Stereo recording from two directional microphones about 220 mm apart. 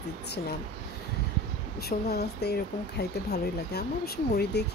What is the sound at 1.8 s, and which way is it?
Speech, 45° left (ahead or behind).